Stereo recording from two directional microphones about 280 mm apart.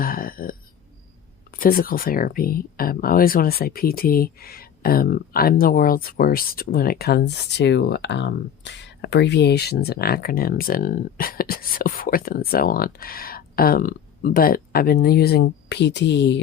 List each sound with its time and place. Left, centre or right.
0.0 s burping: left
1.5 s speech: left